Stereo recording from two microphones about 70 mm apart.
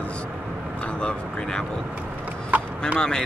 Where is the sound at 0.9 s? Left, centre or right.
Centre.